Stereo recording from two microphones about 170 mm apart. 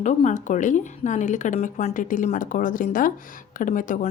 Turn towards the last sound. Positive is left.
turn(degrees=50)  # may be behind; listen again after turning